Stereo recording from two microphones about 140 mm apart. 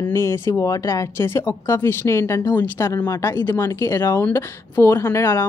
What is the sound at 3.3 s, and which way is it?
Speech, 15° left (ahead or behind).